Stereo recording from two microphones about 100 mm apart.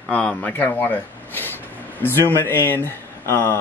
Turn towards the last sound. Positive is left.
turn(degrees=20)  # may be behind; listen again after turning